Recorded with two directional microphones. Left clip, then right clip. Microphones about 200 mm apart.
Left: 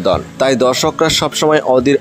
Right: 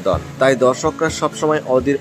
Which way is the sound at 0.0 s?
45° left (ahead or behind).